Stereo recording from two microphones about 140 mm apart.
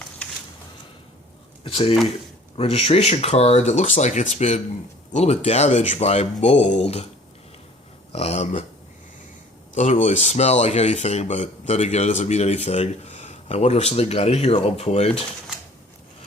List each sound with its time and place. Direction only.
0.2 s a sound: 10° left (ahead or behind)
1.6 s speech: 40° left (ahead or behind)
8.1 s speech: 45° left (ahead or behind)
9.7 s speech: 60° left (ahead or behind)